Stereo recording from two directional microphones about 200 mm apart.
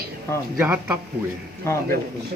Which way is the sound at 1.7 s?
15° left (ahead or behind).